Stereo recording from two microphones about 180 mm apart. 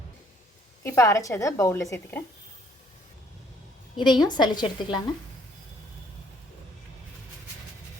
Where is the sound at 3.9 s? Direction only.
25° left (ahead or behind).